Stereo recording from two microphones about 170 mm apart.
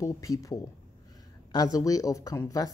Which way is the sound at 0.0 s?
20° left (ahead or behind).